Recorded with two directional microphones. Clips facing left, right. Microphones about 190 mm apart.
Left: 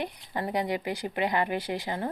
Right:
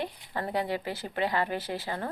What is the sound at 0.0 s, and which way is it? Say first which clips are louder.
Speech: left 1 dB; 15° left (ahead or behind).